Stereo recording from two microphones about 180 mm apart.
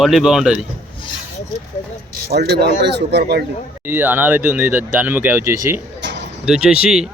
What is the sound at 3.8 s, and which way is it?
Speech, 10° right (ahead or behind).